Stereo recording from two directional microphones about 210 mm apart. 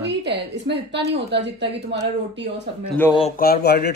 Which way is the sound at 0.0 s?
55° right (ahead or behind).